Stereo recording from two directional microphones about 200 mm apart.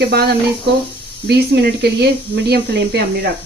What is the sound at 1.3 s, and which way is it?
Speech, 55° right (ahead or behind).